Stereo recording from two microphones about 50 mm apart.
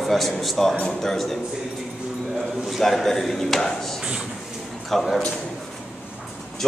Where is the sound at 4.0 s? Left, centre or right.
Centre.